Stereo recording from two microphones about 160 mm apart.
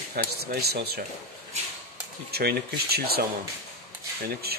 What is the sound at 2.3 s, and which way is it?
Speech, 80° right.